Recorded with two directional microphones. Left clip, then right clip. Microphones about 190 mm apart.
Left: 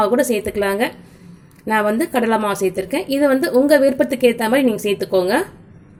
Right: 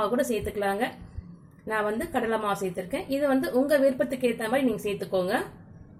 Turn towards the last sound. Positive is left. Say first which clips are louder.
# left 10 dB
turn(degrees=35)  # may be behind; listen again after turning